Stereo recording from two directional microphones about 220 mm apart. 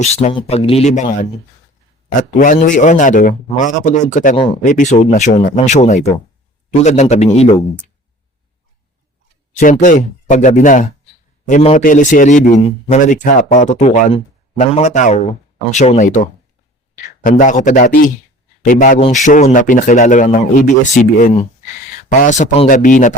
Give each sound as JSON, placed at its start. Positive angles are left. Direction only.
{"t": 0.0, "sound": "speech", "side_deg": 30}
{"t": 2.4, "sound": "a man's voice", "side_deg": 35}
{"t": 9.6, "sound": "a man's voice", "side_deg": 35}